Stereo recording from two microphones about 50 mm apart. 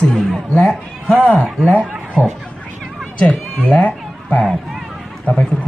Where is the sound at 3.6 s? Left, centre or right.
Left.